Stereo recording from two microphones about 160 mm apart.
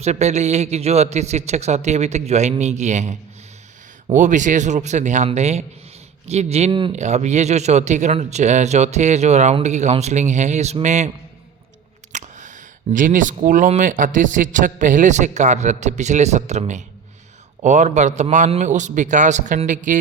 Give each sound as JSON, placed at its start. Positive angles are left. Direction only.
{"t": 0.0, "sound": "speech", "side_deg": -45}
{"t": 6.7, "sound": "speech", "side_deg": -30}
{"t": 6.9, "sound": "speech", "side_deg": -45}
{"t": 12.1, "sound": "speech", "side_deg": -50}